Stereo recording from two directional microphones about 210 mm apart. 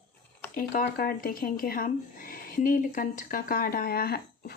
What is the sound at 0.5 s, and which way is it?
Speech, 40° left (ahead or behind).